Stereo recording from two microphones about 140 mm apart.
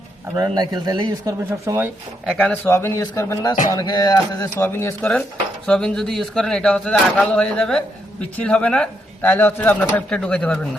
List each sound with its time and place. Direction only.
0.3 s speech: 30° right (ahead or behind)
2.2 s speech: centre (ahead or behind)
2.5 s a man's voice: 15° left (ahead or behind)
4.5 s speech: 15° left (ahead or behind)
5.6 s speech: 5° left (ahead or behind)